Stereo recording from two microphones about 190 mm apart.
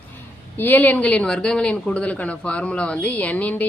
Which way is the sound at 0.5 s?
10° left (ahead or behind).